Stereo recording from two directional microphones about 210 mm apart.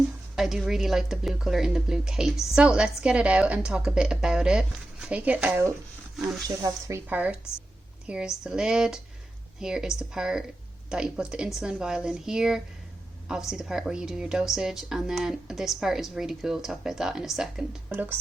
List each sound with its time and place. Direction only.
0.3 s speech: centre (ahead or behind)
6.6 s speech: 15° right (ahead or behind)